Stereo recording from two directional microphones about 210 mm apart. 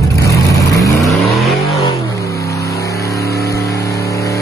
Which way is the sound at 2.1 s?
15° left (ahead or behind).